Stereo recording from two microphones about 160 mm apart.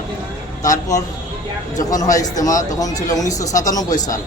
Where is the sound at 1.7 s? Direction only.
20° left (ahead or behind).